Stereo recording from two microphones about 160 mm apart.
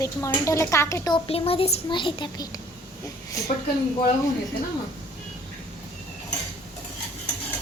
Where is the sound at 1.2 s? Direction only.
35° left (ahead or behind).